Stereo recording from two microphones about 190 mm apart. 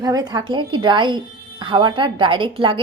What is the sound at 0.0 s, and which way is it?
Speech, 20° right (ahead or behind).